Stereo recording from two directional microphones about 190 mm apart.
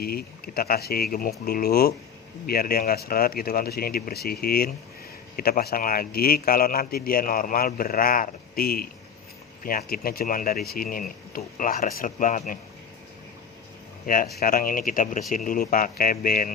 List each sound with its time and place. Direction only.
0.0 s speech: 50° left (ahead or behind)
14.1 s speech: 50° left (ahead or behind)